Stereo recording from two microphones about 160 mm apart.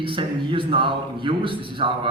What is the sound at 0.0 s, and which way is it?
A man's voice, 30° right (ahead or behind).